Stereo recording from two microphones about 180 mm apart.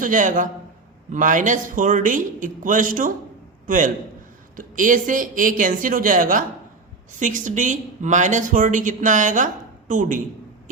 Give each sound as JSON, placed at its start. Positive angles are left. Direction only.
{"t": 0.0, "sound": "speech", "side_deg": -45}